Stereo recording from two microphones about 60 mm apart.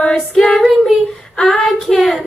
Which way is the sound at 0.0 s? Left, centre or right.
Centre.